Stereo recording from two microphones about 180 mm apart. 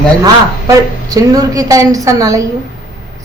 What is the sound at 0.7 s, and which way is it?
A woman's voice, 20° right (ahead or behind).